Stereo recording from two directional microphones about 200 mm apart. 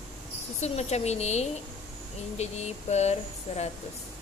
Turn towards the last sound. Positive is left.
turn(degrees=35)  # may be behind; listen again after turning